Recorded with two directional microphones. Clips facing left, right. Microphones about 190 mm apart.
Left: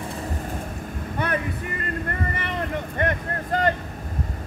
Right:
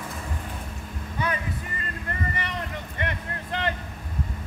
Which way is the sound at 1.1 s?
60° left (ahead or behind).